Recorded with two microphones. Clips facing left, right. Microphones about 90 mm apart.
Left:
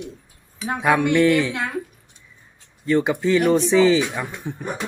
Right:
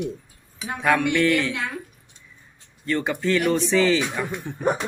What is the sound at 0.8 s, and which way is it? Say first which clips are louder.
Speech: left 3 dB; 15° left (ahead or behind).